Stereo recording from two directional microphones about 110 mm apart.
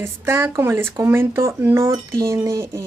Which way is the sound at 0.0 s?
20° right (ahead or behind).